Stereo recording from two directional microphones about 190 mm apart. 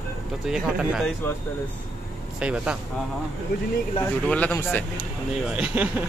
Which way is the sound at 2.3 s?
5° right (ahead or behind).